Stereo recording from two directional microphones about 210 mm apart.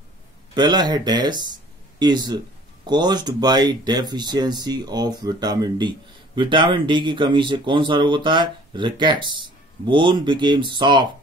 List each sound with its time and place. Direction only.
0.6 s speech: 20° right (ahead or behind)